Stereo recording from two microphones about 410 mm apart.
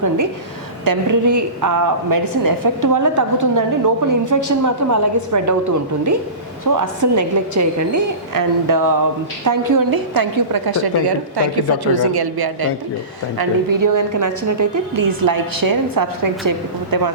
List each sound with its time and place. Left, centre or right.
0.9 s a woman's voice: right
6.7 s a woman's voice: right
13.4 s a woman's voice: right